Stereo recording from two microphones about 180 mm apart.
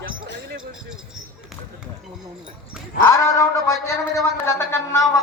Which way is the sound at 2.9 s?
15° left (ahead or behind).